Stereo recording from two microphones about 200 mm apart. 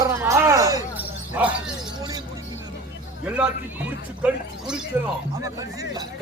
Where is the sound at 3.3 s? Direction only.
5° right (ahead or behind).